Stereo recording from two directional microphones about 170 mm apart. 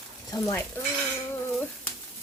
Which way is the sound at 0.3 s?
20° left (ahead or behind).